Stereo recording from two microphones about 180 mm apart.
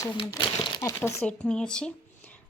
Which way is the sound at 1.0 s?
10° left (ahead or behind).